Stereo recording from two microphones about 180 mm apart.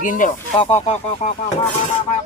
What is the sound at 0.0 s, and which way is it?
Speech, 45° left (ahead or behind).